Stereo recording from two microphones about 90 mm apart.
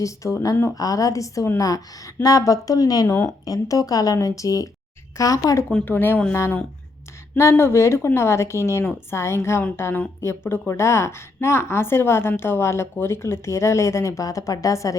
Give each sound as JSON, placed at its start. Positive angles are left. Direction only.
{"t": 0.0, "sound": "speech", "side_deg": 35}
{"t": 5.8, "sound": "a woman's voice", "side_deg": 20}